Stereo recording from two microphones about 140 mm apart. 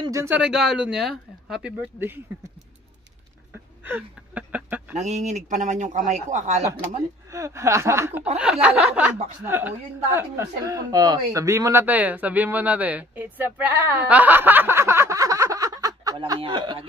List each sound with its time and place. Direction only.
0.0 s speech: 20° right (ahead or behind)
0.4 s speech: 5° right (ahead or behind)
2.0 s speech: 15° right (ahead or behind)
3.8 s a sound: 10° right (ahead or behind)
4.9 s speech: 55° right (ahead or behind)
7.3 s speech: 20° right (ahead or behind)